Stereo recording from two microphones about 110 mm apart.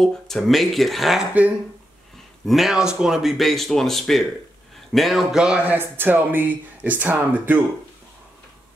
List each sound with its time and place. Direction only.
0.0 s speech: centre (ahead or behind)
2.4 s speech: centre (ahead or behind); by 7.6 s 15° right (ahead or behind)